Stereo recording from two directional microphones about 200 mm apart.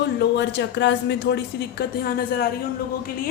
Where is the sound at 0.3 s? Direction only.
60° left (ahead or behind).